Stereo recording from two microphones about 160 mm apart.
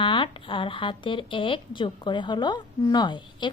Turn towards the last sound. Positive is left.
turn(degrees=30)  # may be behind; listen again after turning